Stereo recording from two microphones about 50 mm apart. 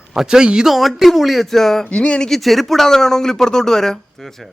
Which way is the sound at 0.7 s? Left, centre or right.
Centre.